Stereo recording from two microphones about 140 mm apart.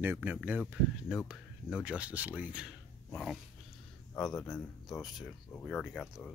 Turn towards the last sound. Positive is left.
turn(degrees=-5)  # may be behind; listen again after turning